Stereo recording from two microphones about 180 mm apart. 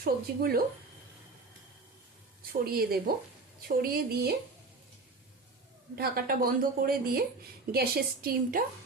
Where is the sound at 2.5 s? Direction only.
60° right (ahead or behind).